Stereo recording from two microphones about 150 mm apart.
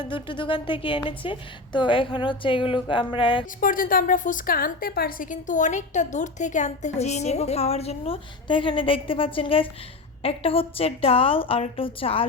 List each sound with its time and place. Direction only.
0.0 s a woman's voice: 35° left (ahead or behind)
3.6 s a woman's voice: 70° left (ahead or behind); by 12.3 s 40° left (ahead or behind)